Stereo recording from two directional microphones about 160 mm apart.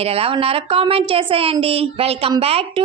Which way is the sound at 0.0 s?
40° right (ahead or behind).